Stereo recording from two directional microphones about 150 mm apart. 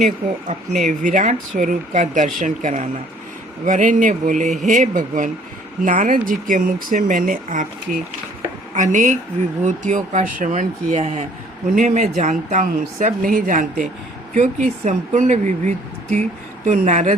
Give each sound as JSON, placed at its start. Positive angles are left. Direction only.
{"t": 0.9, "sound": "speech", "side_deg": -55}
{"t": 14.3, "sound": "speech", "side_deg": -55}